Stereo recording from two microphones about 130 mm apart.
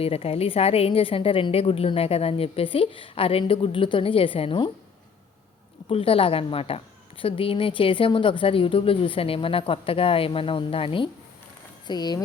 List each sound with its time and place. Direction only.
0.0 s a woman's voice: 50° left (ahead or behind)
5.9 s a woman's voice: 45° left (ahead or behind)
11.9 s speech: 30° left (ahead or behind)